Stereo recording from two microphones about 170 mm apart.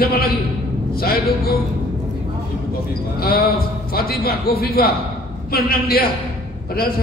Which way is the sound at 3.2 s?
60° left (ahead or behind).